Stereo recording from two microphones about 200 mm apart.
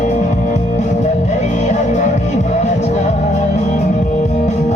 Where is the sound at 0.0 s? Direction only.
35° left (ahead or behind).